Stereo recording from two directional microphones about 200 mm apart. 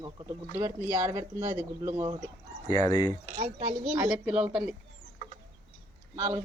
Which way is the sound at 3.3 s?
45° right (ahead or behind).